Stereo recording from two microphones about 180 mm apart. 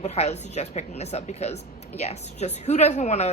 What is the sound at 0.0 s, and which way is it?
A man's voice, 35° left (ahead or behind).